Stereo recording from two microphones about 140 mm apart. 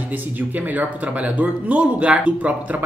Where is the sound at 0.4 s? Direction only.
10° right (ahead or behind).